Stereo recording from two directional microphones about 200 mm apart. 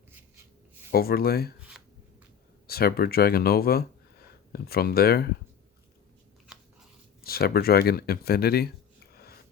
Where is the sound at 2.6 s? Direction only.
50° left (ahead or behind).